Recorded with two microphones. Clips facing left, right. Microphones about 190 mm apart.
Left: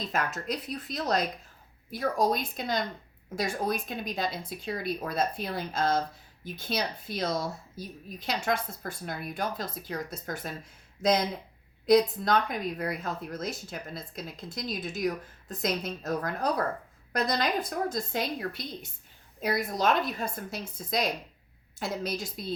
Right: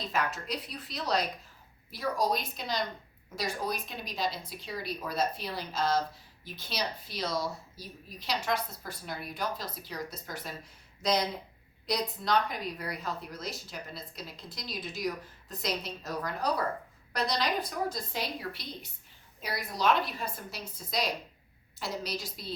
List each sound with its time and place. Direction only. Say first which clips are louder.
0.1 s a woman's voice: even; 45° left (ahead or behind)